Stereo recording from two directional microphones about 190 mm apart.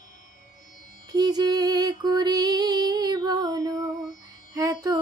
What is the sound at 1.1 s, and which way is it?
Female singing, 20° right (ahead or behind).